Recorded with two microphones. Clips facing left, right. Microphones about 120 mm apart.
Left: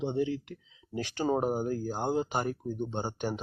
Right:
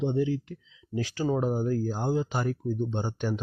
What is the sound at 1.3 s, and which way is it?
Speech, 45° left (ahead or behind).